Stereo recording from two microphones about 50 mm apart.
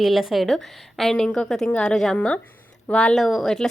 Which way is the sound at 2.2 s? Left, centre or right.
Left.